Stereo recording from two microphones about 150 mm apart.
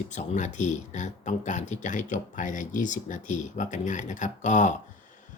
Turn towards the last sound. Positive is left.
turn(degrees=55)  # may be behind; listen again after turning